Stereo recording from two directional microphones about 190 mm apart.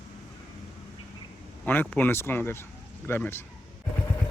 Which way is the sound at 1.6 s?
10° left (ahead or behind).